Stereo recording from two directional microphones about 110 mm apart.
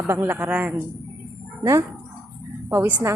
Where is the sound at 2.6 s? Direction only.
25° right (ahead or behind).